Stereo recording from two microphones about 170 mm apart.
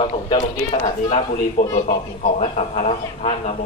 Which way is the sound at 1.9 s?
45° left (ahead or behind).